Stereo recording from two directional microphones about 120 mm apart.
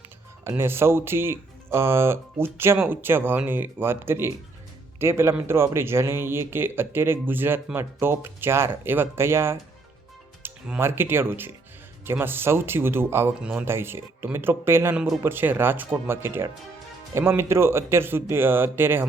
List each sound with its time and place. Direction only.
0.4 s speech: 20° right (ahead or behind)
13.4 s speech: 10° right (ahead or behind)
13.7 s speech: 20° right (ahead or behind)
14.9 s speech: centre (ahead or behind)
15.2 s speech: 15° right (ahead or behind)